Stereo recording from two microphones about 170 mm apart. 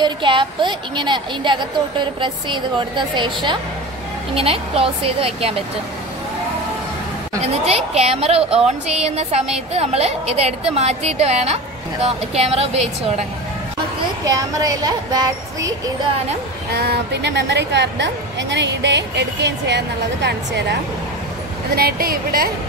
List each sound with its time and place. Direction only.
0.0 s a woman's voice: 30° right (ahead or behind)
7.4 s a woman's voice: 40° right (ahead or behind)
14.2 s a woman's voice: 20° right (ahead or behind)
16.7 s a woman's voice: 70° right (ahead or behind); by 20.6 s 85° right
21.7 s speech: 60° right (ahead or behind)